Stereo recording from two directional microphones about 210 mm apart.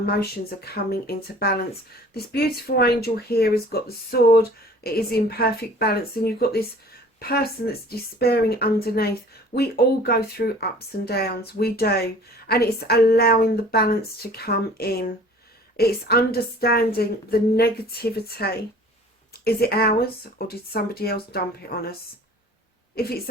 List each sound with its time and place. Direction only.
0.0 s a woman's voice: 45° left (ahead or behind)